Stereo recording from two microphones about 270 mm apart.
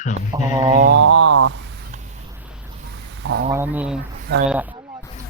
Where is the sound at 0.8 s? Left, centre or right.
Right.